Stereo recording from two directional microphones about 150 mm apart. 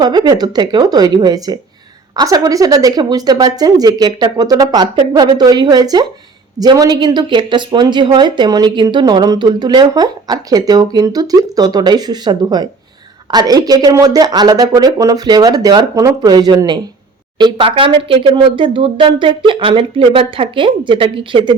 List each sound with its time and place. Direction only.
0.0 s a woman's voice: 30° right (ahead or behind)